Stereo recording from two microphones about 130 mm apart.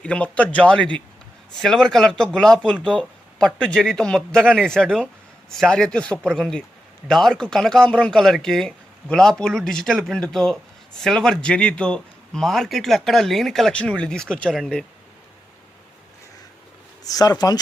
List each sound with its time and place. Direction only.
0.0 s speech: 10° left (ahead or behind)
17.0 s speech: 30° left (ahead or behind)